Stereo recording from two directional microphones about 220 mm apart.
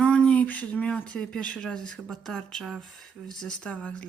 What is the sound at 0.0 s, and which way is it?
Speech, 5° left (ahead or behind).